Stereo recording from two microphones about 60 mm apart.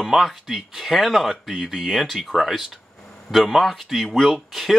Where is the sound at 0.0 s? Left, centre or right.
Centre.